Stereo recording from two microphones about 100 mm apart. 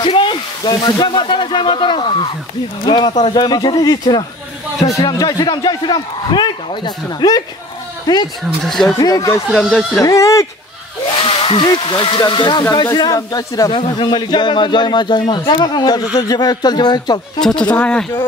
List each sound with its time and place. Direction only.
0.0 s a sound: 55° left (ahead or behind)
0.8 s speech: 50° left (ahead or behind)
8.6 s speech: centre (ahead or behind)
8.9 s speech: 35° left (ahead or behind)
9.5 s speech: centre (ahead or behind)
10.0 s speech: 35° left (ahead or behind)
11.2 s speech: 60° left (ahead or behind); by 13.7 s 35° left (ahead or behind)
13.7 s speech: 70° left (ahead or behind)
13.9 s speech: 50° left (ahead or behind)
17.4 s speech: 5° left (ahead or behind)